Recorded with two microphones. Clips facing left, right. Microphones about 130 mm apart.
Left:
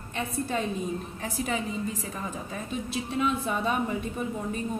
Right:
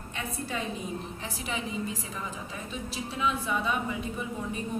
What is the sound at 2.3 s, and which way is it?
A woman's voice, 50° left (ahead or behind).